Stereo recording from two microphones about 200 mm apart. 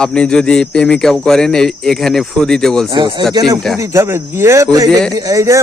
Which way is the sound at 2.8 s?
25° right (ahead or behind).